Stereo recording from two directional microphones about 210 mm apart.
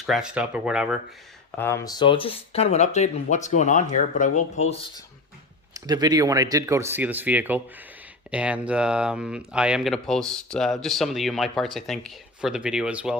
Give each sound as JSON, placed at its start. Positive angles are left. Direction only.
{"t": 0.0, "sound": "speech", "side_deg": 0}
{"t": 1.5, "sound": "speech", "side_deg": 10}
{"t": 5.7, "sound": "speech", "side_deg": -20}